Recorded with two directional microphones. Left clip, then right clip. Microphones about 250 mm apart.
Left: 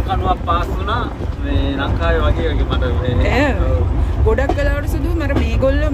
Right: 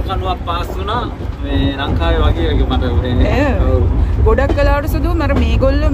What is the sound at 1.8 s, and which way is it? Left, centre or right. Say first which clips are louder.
Speech: left 2 dB; right.